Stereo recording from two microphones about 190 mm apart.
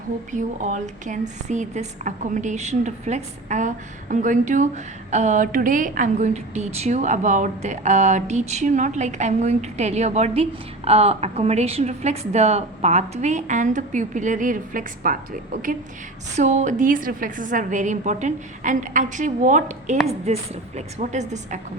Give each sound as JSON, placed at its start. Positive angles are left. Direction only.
{"t": 0.3, "sound": "a woman's voice", "side_deg": -40}
{"t": 16.3, "sound": "a woman's voice", "side_deg": -40}